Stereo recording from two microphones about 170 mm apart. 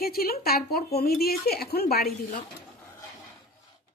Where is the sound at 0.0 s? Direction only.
60° left (ahead or behind).